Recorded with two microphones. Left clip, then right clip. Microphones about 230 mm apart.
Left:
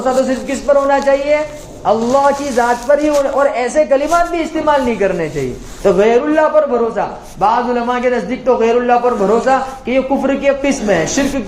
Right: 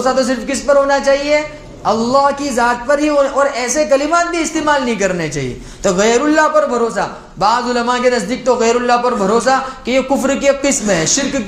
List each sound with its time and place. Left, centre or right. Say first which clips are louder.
0.0 s a man's voice: even; right